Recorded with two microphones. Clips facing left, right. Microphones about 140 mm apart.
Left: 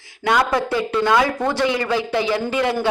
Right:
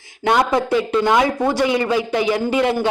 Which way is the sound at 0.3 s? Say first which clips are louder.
Right 2 dB; 20° right (ahead or behind).